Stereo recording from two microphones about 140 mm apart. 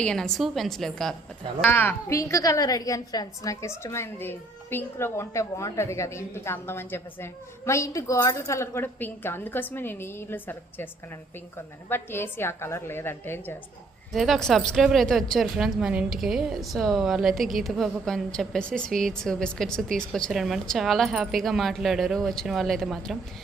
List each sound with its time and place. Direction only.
0.0 s a woman's voice: 5° left (ahead or behind)
1.6 s a woman's voice: 15° left (ahead or behind)
14.1 s a woman's voice: centre (ahead or behind)